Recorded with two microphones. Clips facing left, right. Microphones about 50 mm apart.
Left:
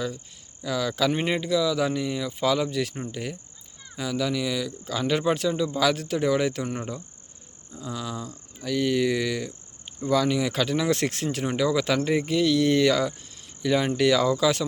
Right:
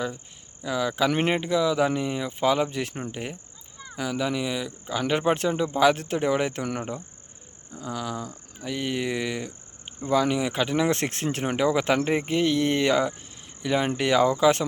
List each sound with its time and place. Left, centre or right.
0.6 s speech: right
7.8 s speech: right